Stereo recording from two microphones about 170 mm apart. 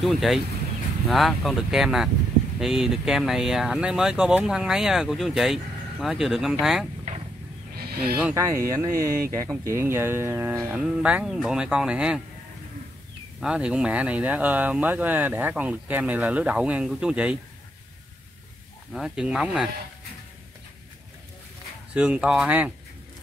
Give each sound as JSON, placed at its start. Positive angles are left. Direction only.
{"t": 0.0, "sound": "speech", "side_deg": 0}
{"t": 7.7, "sound": "a sound", "side_deg": -65}
{"t": 8.2, "sound": "speech", "side_deg": -10}
{"t": 13.4, "sound": "speech", "side_deg": -5}
{"t": 18.9, "sound": "speech", "side_deg": -5}
{"t": 21.9, "sound": "speech", "side_deg": -5}